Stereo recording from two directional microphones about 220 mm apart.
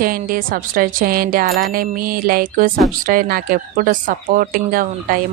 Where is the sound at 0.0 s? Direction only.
40° right (ahead or behind).